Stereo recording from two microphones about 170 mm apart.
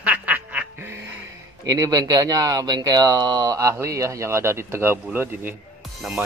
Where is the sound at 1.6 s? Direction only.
20° right (ahead or behind).